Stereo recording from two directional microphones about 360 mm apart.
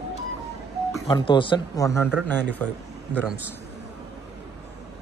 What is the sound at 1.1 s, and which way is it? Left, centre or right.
A man's voice, centre.